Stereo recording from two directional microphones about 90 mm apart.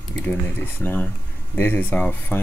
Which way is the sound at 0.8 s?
20° left (ahead or behind).